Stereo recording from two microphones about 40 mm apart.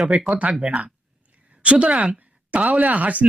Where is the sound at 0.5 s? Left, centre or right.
Right.